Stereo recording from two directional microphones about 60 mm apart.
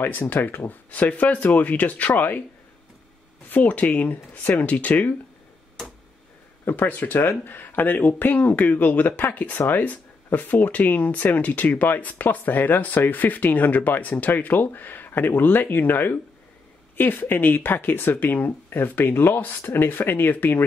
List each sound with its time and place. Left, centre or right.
0.0 s speech: left
3.4 s speech: left
6.6 s speech: left